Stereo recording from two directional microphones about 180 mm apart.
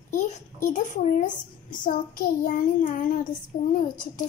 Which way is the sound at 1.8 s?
50° left (ahead or behind).